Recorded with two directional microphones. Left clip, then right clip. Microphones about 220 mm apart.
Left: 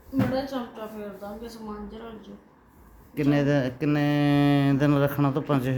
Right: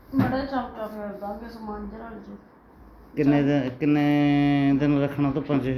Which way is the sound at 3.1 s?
25° left (ahead or behind).